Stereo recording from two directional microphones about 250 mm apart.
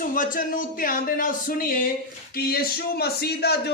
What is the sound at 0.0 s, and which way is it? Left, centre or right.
Speech, left.